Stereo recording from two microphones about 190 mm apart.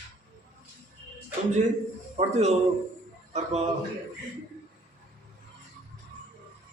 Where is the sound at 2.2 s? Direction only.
35° right (ahead or behind).